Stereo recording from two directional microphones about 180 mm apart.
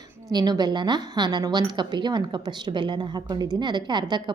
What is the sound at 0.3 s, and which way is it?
A woman's voice, 20° right (ahead or behind).